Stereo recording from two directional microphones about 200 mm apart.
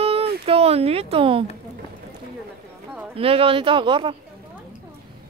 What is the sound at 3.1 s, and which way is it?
Speech, 30° right (ahead or behind).